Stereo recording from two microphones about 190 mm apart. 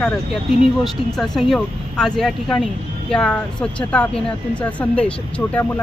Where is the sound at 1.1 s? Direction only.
Centre (ahead or behind).